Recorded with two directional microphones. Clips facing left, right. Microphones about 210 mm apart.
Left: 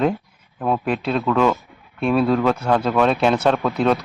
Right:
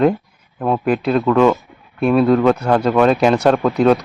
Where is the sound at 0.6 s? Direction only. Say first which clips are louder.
Right 4 dB; 5° right (ahead or behind).